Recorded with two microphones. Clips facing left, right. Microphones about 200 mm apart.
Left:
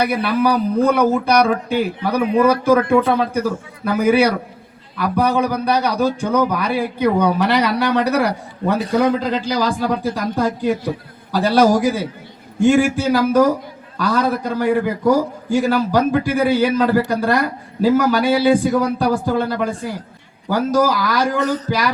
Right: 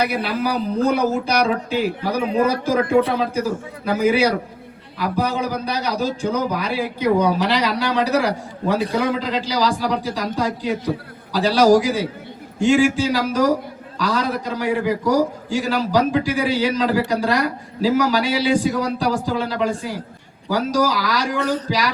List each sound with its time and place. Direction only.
0.0 s speech: 60° left (ahead or behind)
3.8 s a man's voice: 55° left (ahead or behind)